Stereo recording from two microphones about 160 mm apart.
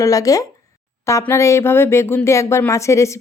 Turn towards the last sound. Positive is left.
turn(degrees=20)  # may be behind; listen again after turning